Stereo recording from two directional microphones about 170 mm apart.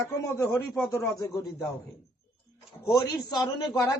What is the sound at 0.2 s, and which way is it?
Speech, 15° left (ahead or behind).